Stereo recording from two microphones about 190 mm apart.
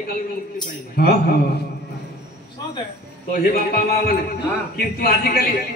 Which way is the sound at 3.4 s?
55° left (ahead or behind).